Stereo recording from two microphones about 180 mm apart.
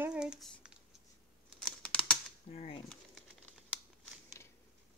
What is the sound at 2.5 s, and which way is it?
Speech, 35° left (ahead or behind).